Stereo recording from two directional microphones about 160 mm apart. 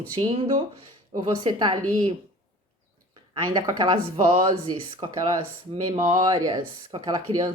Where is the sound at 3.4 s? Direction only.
30° right (ahead or behind).